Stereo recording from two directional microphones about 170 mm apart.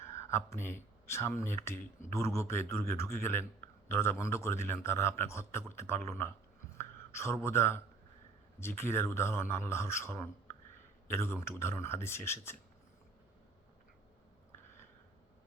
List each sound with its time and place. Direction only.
0.0 s a man's voice: 15° left (ahead or behind)
6.7 s a sound: 15° left (ahead or behind)
8.5 s a man's voice: 15° left (ahead or behind)